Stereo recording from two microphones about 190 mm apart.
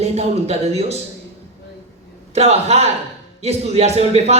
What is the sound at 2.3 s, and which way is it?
Speech, 35° right (ahead or behind).